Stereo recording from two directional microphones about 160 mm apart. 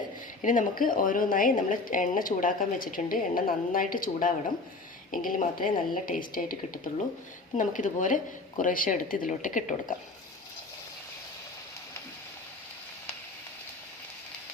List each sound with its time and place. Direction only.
0.4 s a woman's voice: 55° left (ahead or behind)